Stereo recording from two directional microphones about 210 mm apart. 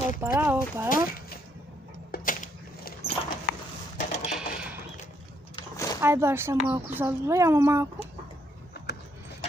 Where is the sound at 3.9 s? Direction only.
35° left (ahead or behind).